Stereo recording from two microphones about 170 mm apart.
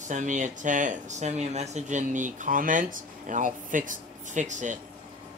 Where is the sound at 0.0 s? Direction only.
45° right (ahead or behind).